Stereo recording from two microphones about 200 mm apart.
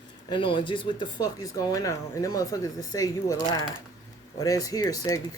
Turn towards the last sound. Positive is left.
turn(degrees=15)  # may be behind; listen again after turning